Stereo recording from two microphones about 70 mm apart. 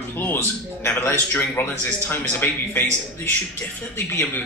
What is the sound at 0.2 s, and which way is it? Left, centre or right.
A man's voice, left.